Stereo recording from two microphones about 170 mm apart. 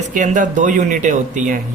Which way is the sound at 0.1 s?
50° right (ahead or behind).